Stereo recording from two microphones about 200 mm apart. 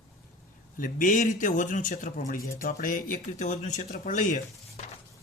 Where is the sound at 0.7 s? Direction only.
40° left (ahead or behind).